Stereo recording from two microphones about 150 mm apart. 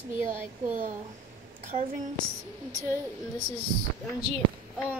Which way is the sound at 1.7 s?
35° right (ahead or behind).